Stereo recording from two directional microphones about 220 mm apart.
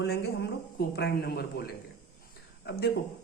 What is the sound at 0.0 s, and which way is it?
A man's voice, 50° left (ahead or behind).